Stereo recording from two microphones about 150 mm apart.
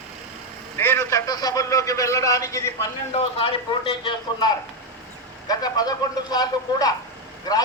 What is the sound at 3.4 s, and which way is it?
A man's voice, 35° left (ahead or behind).